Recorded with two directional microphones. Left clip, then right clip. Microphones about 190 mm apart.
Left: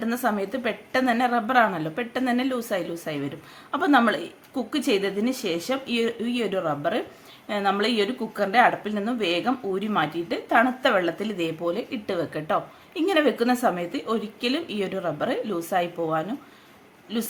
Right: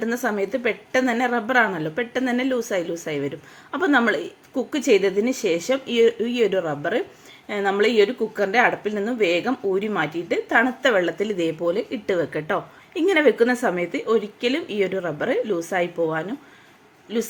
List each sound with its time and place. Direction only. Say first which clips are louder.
0.0 s speech: right 2 dB; 15° right (ahead or behind)